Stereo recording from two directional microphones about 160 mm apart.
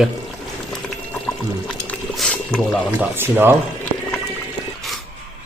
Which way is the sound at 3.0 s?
15° right (ahead or behind).